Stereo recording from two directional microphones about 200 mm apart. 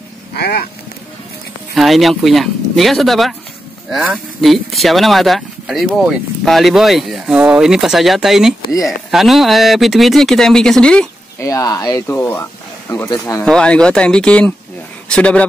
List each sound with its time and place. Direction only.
0.3 s speech: 50° left (ahead or behind)
1.8 s speech: centre (ahead or behind)
11.4 s speech: 15° left (ahead or behind)